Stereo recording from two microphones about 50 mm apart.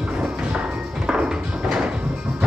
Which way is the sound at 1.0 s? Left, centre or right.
Centre.